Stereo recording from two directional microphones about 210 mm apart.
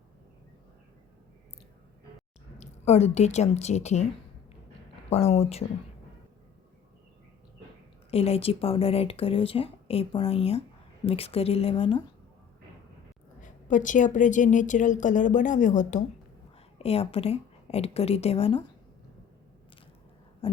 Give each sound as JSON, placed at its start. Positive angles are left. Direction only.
{"t": 2.6, "sound": "speech", "side_deg": 30}
{"t": 5.0, "sound": "speech", "side_deg": 30}
{"t": 8.1, "sound": "speech", "side_deg": 30}
{"t": 13.4, "sound": "a woman's voice", "side_deg": 35}
{"t": 20.4, "sound": "a sound", "side_deg": 25}